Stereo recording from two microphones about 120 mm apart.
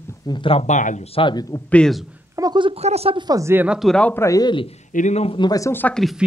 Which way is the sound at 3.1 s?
35° right (ahead or behind).